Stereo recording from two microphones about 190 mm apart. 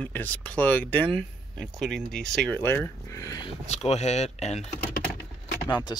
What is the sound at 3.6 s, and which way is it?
Speech, 35° left (ahead or behind).